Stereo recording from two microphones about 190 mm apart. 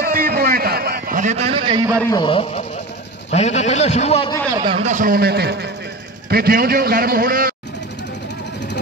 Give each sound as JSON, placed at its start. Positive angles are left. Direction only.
{"t": 0.0, "sound": "a sound", "side_deg": -50}
{"t": 2.0, "sound": "a man's voice", "side_deg": 25}
{"t": 4.5, "sound": "a man's voice", "side_deg": -25}
{"t": 4.8, "sound": "a man's voice", "side_deg": -45}